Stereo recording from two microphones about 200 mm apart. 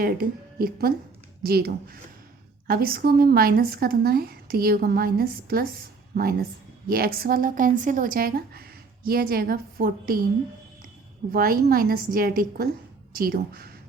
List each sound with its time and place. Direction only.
0.0 s speech: 50° right (ahead or behind)
11.3 s speech: 45° right (ahead or behind)